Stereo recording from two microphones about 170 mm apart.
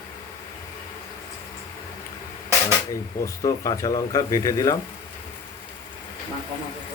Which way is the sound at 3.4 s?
20° left (ahead or behind).